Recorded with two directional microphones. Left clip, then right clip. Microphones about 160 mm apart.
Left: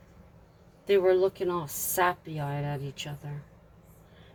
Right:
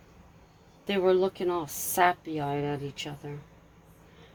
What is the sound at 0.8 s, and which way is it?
Speech, 40° right (ahead or behind).